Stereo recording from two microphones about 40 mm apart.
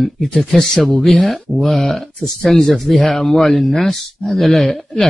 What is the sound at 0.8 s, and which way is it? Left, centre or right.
Speech, centre.